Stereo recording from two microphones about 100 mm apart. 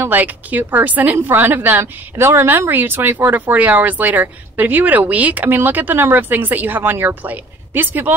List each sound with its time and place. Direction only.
0.0 s a woman's voice: 20° right (ahead or behind)